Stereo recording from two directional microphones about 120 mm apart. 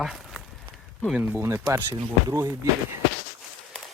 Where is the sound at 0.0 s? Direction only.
Centre (ahead or behind).